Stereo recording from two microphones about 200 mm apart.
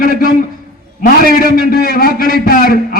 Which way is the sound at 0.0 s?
45° left (ahead or behind).